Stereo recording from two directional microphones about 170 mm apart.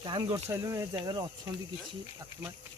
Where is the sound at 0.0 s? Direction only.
30° right (ahead or behind).